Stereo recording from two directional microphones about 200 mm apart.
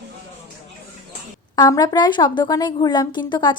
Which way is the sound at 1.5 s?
20° left (ahead or behind).